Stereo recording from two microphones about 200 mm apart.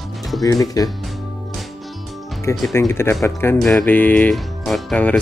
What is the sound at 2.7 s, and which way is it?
Speech, 10° left (ahead or behind).